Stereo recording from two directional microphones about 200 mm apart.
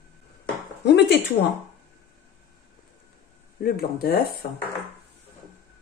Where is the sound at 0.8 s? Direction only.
60° left (ahead or behind).